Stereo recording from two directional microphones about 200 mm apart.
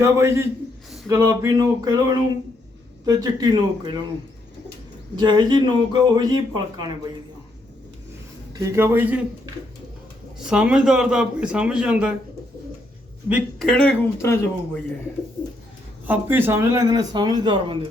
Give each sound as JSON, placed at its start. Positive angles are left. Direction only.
{"t": 0.0, "sound": "a sound", "side_deg": -15}
{"t": 3.1, "sound": "speech", "side_deg": -20}
{"t": 5.1, "sound": "speech", "side_deg": -20}
{"t": 8.5, "sound": "a sound", "side_deg": -15}
{"t": 10.3, "sound": "a man's voice", "side_deg": -5}
{"t": 13.2, "sound": "a man's voice", "side_deg": 0}
{"t": 16.0, "sound": "speech", "side_deg": -10}